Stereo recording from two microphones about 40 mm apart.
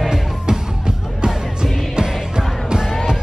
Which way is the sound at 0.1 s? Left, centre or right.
Centre.